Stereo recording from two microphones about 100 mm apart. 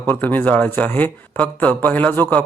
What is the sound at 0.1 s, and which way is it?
Speech, 15° left (ahead or behind).